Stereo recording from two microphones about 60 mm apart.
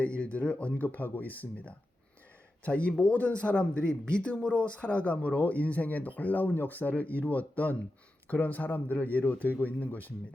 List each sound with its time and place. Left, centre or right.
0.2 s speech: left